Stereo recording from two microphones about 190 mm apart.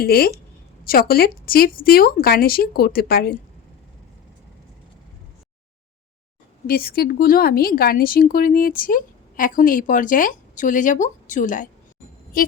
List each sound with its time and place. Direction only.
0.0 s speech: 55° left (ahead or behind)
6.7 s speech: 55° left (ahead or behind)